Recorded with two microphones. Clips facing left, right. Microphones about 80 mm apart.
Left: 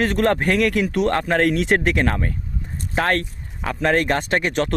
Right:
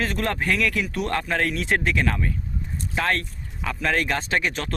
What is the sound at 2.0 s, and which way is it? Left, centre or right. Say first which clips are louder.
Speech: left 3 dB; left.